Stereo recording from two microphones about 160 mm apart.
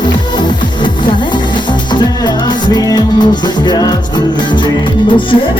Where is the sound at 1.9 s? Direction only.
25° left (ahead or behind).